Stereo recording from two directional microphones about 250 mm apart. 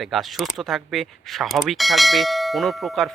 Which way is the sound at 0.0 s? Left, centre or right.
Centre.